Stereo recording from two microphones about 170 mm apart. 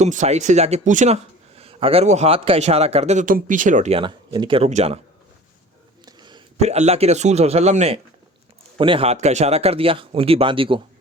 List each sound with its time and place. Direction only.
0.0 s speech: 45° right (ahead or behind)
3.9 s speech: 30° right (ahead or behind)
6.1 s a sound: 25° right (ahead or behind)
6.6 s speech: 40° right (ahead or behind)